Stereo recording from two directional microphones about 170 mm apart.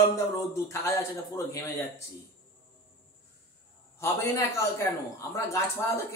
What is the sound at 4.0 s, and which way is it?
A man's voice, 15° left (ahead or behind).